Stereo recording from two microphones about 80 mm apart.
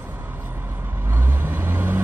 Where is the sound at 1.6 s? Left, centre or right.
Right.